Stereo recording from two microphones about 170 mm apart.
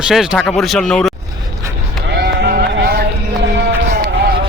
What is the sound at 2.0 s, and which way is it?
Sheep, 80° right.